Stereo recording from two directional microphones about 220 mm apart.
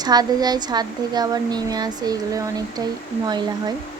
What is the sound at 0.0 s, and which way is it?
A woman's voice, 20° right (ahead or behind).